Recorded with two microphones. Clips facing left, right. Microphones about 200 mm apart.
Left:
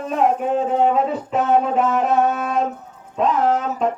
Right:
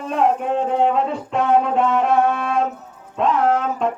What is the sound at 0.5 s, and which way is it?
Music, 5° left (ahead or behind).